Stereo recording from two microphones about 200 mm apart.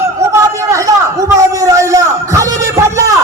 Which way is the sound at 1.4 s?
15° right (ahead or behind).